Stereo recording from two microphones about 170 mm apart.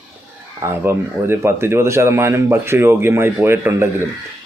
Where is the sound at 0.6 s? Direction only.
15° right (ahead or behind).